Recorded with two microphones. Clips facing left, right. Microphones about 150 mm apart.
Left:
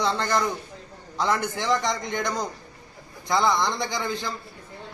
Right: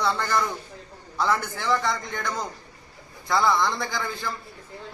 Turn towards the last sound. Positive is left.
turn(degrees=20)  # may be behind; listen again after turning